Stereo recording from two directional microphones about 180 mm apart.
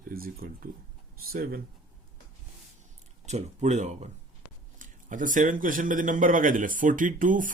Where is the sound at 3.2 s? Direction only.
40° right (ahead or behind).